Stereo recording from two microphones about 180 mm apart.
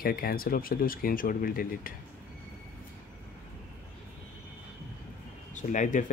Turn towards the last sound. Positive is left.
turn(degrees=45)  # may be behind; listen again after turning